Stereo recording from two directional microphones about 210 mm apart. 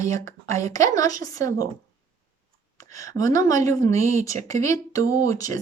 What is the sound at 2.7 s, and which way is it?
A woman's voice, 15° left (ahead or behind).